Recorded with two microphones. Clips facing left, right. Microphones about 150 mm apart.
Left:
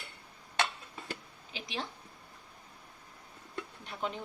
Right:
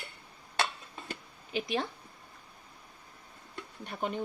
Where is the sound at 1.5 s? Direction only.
55° right (ahead or behind).